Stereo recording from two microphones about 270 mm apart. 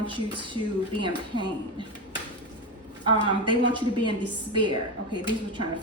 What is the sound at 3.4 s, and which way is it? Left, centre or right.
A woman's voice, centre.